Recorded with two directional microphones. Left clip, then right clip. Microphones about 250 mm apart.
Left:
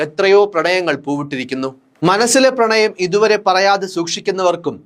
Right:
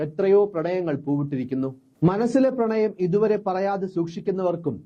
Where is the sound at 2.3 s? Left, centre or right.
Centre.